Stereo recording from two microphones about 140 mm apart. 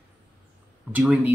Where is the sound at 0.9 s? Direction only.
10° right (ahead or behind).